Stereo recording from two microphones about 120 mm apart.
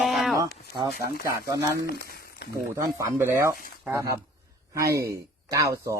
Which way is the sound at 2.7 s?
20° right (ahead or behind).